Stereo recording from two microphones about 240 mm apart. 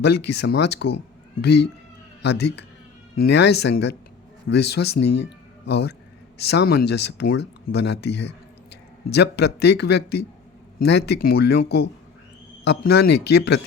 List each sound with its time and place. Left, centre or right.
0.0 s a man's voice: left